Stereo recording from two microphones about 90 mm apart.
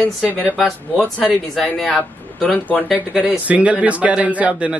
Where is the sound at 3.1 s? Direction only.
15° right (ahead or behind).